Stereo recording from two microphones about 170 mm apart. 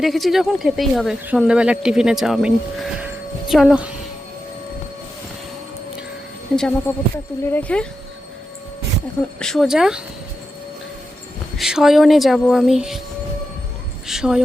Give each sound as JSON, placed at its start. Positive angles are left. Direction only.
{"t": 0.0, "sound": "speech", "side_deg": 0}
{"t": 6.6, "sound": "speech", "side_deg": 5}
{"t": 9.4, "sound": "speech", "side_deg": 0}
{"t": 11.5, "sound": "speech", "side_deg": 0}
{"t": 14.1, "sound": "speech", "side_deg": -5}